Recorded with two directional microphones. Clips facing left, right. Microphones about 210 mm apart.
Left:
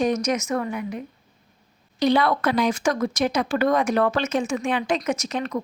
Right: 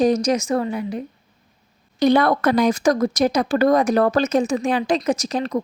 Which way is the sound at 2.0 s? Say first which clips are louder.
Right 4 dB; 45° right (ahead or behind).